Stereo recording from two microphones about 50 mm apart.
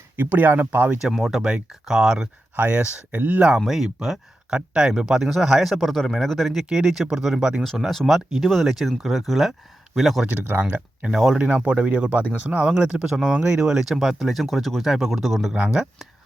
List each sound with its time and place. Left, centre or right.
0.2 s speech: right
1.0 s speech: centre
2.6 s speech: right
3.7 s speech: centre
7.9 s speech: centre
10.2 s speech: right
10.6 s speech: right
11.1 s speech: centre
11.3 s speech: right; by 15.5 s centre
15.5 s speech: centre